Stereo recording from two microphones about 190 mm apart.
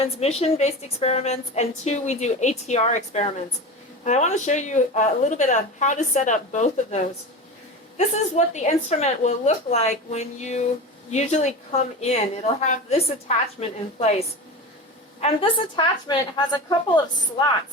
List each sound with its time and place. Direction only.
0.0 s a woman's voice: 35° left (ahead or behind)